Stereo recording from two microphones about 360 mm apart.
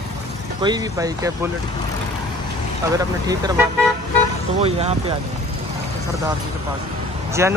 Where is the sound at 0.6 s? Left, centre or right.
Centre.